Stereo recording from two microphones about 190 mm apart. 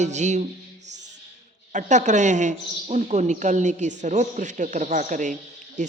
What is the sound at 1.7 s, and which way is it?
A man's voice, 40° right (ahead or behind).